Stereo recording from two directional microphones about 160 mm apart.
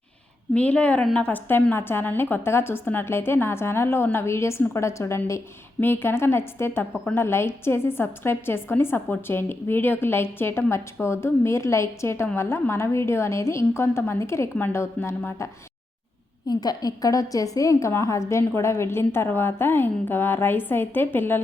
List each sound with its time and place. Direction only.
0.5 s a woman's voice: 10° left (ahead or behind)
16.5 s a woman's voice: 25° left (ahead or behind)